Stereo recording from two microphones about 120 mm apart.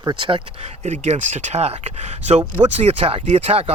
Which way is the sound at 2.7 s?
60° right (ahead or behind).